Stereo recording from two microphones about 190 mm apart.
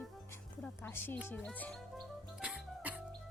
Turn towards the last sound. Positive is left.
turn(degrees=-5)  # may be behind; listen again after turning